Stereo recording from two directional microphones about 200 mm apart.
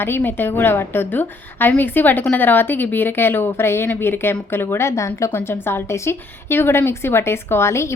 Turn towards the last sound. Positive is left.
turn(degrees=15)  # may be behind; listen again after turning